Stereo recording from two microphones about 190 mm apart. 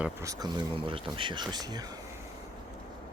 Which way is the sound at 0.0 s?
15° right (ahead or behind).